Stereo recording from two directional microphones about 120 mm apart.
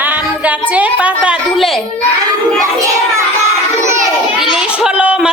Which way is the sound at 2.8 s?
25° right (ahead or behind).